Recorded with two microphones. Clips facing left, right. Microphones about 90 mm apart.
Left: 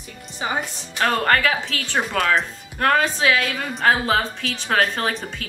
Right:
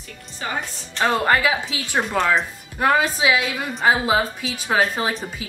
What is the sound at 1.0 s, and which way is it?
Speech, 10° right (ahead or behind).